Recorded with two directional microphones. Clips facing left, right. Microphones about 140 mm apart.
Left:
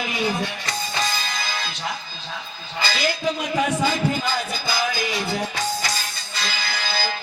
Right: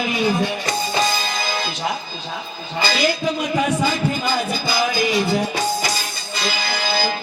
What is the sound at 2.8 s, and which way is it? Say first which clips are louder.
Speech: right 5 dB; 20° right (ahead or behind).